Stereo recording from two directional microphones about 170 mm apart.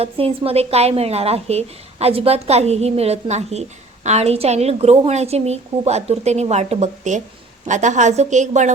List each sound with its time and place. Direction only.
0.0 s a woman's voice: 35° right (ahead or behind)